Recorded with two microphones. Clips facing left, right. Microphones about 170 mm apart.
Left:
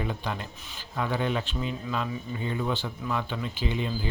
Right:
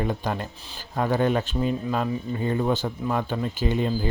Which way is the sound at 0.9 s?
45° right (ahead or behind).